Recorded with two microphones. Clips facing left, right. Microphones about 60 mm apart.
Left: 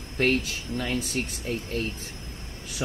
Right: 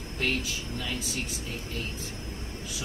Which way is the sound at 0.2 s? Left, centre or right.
Left.